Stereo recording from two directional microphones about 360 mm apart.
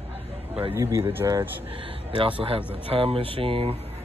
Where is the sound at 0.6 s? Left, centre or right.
Centre.